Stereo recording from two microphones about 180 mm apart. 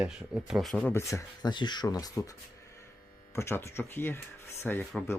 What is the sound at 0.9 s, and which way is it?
Speech, 15° left (ahead or behind).